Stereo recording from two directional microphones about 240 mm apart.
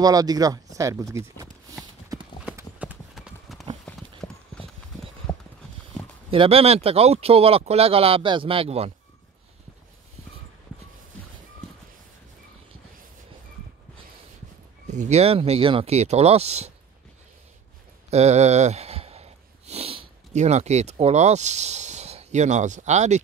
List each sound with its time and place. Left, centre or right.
0.0 s speech: centre
2.4 s clip-clop: centre
6.3 s speech: right
14.9 s speech: right
18.1 s speech: right